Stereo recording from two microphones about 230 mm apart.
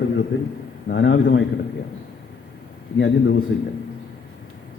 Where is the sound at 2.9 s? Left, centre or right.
Left.